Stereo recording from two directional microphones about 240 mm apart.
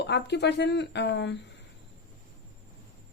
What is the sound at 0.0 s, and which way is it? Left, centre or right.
Speech, left.